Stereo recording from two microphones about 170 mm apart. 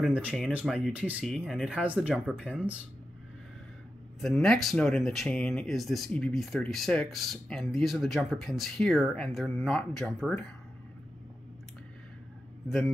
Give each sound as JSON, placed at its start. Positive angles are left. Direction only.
{"t": 0.0, "sound": "speech", "side_deg": -5}
{"t": 4.2, "sound": "speech", "side_deg": 0}
{"t": 12.6, "sound": "a man's voice", "side_deg": 0}